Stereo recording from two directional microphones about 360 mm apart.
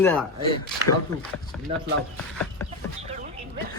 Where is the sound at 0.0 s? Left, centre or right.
Centre.